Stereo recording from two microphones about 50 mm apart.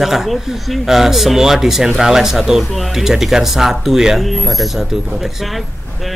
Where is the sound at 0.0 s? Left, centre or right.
Centre.